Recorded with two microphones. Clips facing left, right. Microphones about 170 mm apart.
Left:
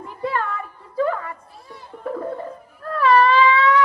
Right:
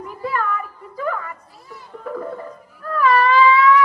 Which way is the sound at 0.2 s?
30° left (ahead or behind).